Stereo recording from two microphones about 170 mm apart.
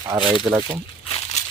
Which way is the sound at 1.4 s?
45° left (ahead or behind).